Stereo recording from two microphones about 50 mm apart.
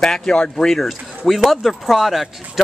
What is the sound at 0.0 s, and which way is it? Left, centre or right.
Speech, centre.